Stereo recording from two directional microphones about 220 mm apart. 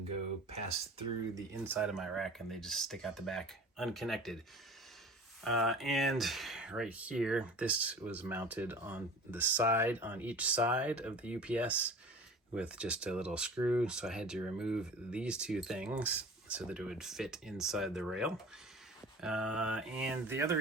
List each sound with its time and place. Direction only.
0.5 s speech: 25° right (ahead or behind)
1.6 s speech: 5° right (ahead or behind)
5.4 s speech: centre (ahead or behind)